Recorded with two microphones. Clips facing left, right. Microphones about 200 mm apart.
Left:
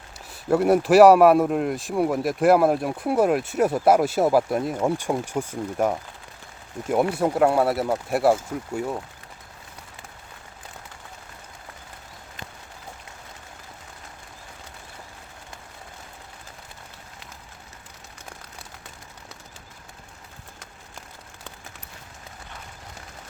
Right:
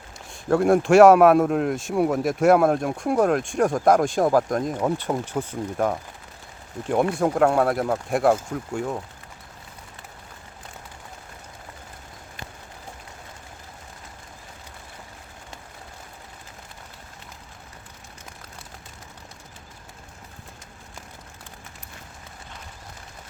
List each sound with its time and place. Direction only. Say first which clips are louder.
0.3 s speech: even; 5° left (ahead or behind)